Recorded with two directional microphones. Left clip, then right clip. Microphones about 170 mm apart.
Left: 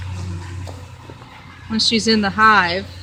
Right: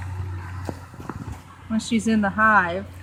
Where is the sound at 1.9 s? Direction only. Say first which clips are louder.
Left 6 dB; 25° left (ahead or behind).